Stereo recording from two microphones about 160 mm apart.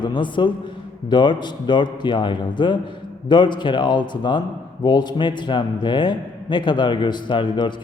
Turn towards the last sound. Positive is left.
turn(degrees=30)  # may be behind; listen again after turning